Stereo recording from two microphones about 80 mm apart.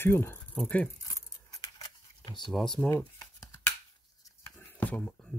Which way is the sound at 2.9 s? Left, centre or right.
Left.